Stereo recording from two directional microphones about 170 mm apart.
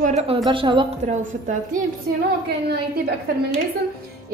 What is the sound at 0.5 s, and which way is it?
Speech, 30° right (ahead or behind).